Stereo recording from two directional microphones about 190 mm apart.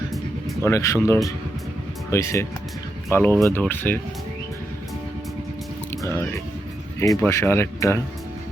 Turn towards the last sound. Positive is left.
turn(degrees=15)  # may be behind; listen again after turning